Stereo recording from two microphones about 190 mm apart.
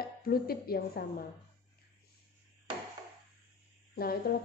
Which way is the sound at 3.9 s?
50° left (ahead or behind).